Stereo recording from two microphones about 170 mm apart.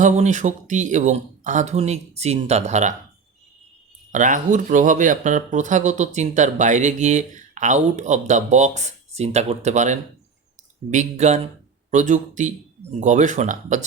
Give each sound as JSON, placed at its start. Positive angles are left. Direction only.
{"t": 0.0, "sound": "speech", "side_deg": -45}
{"t": 4.1, "sound": "speech", "side_deg": -45}